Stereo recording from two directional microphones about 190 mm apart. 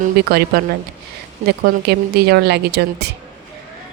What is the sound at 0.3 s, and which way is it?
A woman's voice, 55° right (ahead or behind).